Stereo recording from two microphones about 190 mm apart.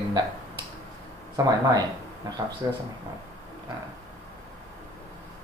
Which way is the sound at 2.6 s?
20° right (ahead or behind).